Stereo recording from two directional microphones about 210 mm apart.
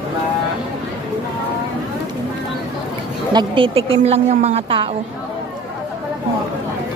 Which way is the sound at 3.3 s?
25° right (ahead or behind).